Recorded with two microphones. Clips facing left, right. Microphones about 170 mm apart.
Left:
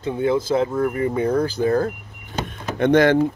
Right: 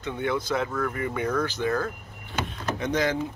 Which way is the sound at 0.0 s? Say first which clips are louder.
Left 7 dB; 30° left (ahead or behind).